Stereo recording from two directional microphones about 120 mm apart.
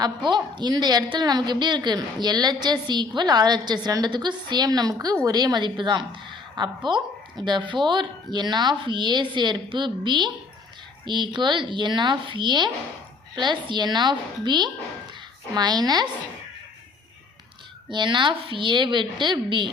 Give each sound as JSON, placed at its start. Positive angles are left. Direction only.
{"t": 0.0, "sound": "a woman's voice", "side_deg": -40}
{"t": 17.9, "sound": "a woman's voice", "side_deg": -40}